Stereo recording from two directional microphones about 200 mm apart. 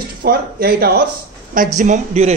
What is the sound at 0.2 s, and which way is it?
Speech, 50° right (ahead or behind).